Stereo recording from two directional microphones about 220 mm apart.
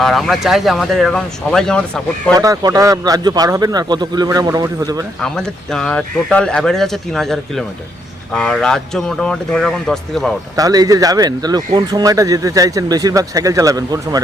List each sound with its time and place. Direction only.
0.0 s speech: centre (ahead or behind)
2.3 s speech: 15° right (ahead or behind)
5.2 s speech: centre (ahead or behind)
10.6 s speech: 15° right (ahead or behind)